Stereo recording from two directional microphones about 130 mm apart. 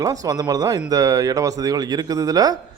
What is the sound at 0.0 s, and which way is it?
A man's voice, 30° right (ahead or behind).